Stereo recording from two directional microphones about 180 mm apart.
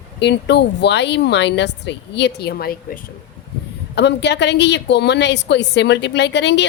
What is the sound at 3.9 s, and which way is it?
A woman's voice, 75° left (ahead or behind).